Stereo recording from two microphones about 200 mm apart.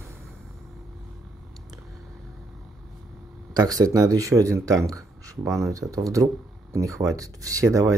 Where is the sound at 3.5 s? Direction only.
20° right (ahead or behind).